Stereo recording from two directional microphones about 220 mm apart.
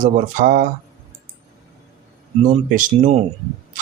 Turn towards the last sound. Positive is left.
turn(degrees=-35)  # may be behind; listen again after turning